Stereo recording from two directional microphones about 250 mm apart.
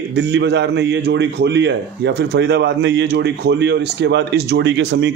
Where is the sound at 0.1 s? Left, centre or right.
Right.